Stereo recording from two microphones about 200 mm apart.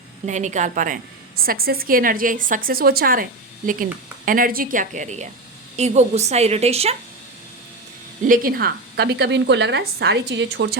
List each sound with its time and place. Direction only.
0.3 s a woman's voice: 35° right (ahead or behind)
8.2 s a woman's voice: 45° right (ahead or behind); by 10.8 s 60° right (ahead or behind)